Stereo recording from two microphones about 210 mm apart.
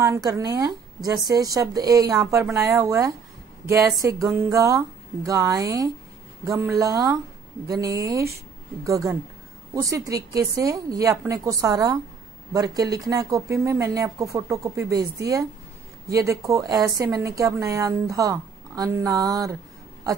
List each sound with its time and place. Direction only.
0.0 s a woman's voice: 15° right (ahead or behind)